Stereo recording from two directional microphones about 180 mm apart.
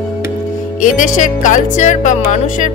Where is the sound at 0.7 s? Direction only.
45° left (ahead or behind).